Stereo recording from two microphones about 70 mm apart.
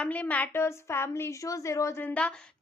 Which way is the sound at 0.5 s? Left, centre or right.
Left.